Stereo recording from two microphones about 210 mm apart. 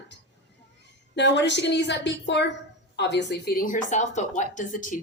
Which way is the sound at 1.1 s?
55° left (ahead or behind).